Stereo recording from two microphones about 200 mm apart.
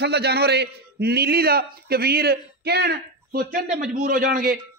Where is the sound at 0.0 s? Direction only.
55° right (ahead or behind).